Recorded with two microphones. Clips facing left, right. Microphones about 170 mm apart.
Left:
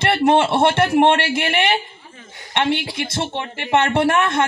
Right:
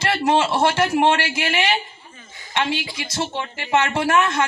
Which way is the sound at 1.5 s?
55° left (ahead or behind).